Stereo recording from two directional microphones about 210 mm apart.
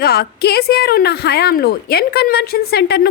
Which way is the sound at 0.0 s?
50° left (ahead or behind).